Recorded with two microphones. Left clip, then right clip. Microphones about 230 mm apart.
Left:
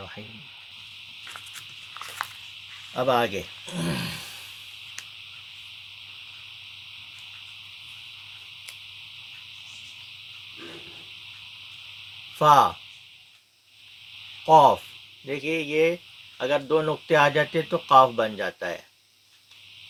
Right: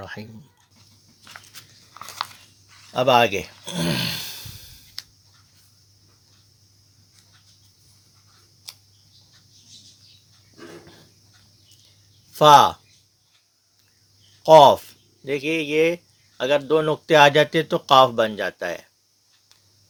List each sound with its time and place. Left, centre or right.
2.9 s speech: right
12.4 s speech: right
14.4 s speech: right